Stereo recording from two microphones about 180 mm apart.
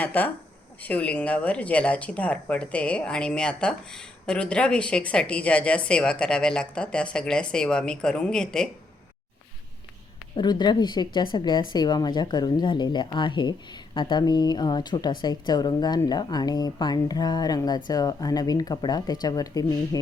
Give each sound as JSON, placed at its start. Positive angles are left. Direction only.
{"t": 0.0, "sound": "speech", "side_deg": 10}
{"t": 10.3, "sound": "speech", "side_deg": 25}